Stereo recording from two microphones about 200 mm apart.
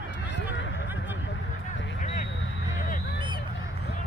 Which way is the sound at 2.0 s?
40° left (ahead or behind).